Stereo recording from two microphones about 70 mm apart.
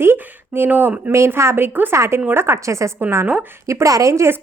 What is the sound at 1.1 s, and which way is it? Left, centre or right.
Speech, right.